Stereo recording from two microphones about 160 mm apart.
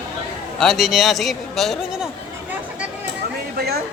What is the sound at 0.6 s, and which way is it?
A man's voice, centre (ahead or behind).